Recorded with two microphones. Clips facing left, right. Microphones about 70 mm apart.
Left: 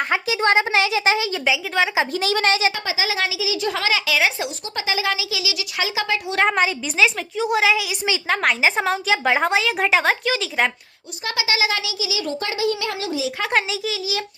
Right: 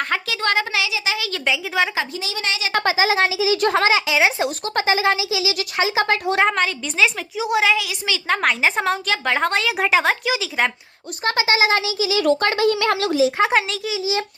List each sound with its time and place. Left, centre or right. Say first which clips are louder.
0.1 s a child's voice: left 6 dB; centre
0.8 s speech: left 5 dB; left
1.5 s a woman's voice: right 1 dB; centre
2.1 s a woman's voice: left 7 dB; left
2.5 s speech: left 4 dB; left
2.7 s speech: right 6 dB; right
3.9 s speech: right 3 dB; right
4.4 s speech: right 6 dB; right
6.5 s a woman's voice: left 1 dB; centre
11.2 s speech: right 4 dB; right
12.4 s speech: right 5 dB; right
13.5 s a woman's voice: right 1 dB; centre
13.9 s speech: right 4 dB; right